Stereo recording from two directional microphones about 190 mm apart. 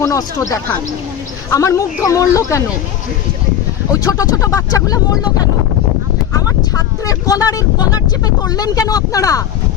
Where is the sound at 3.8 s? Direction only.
15° left (ahead or behind).